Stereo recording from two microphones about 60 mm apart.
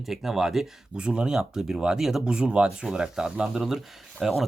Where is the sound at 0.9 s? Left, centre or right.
Centre.